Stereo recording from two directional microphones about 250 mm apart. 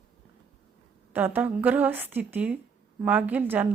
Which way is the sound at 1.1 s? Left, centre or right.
Centre.